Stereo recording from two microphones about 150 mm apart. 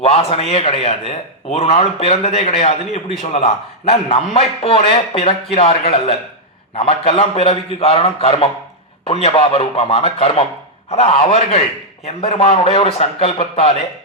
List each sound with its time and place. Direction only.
0.0 s a man's voice: 40° left (ahead or behind)